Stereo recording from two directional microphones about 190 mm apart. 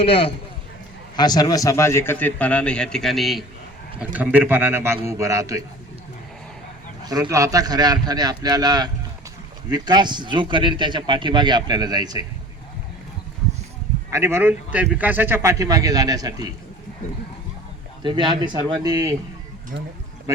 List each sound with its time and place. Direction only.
0.0 s a man's voice: 30° left (ahead or behind); by 5.6 s 15° right (ahead or behind)
7.1 s speech: 15° right (ahead or behind)
14.1 s speech: 15° right (ahead or behind)
18.0 s speech: 25° right (ahead or behind)